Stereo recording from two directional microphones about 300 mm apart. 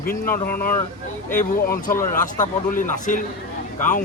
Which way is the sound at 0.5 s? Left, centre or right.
Centre.